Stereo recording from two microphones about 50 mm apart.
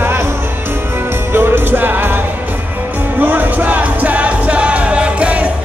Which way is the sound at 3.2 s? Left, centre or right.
Right.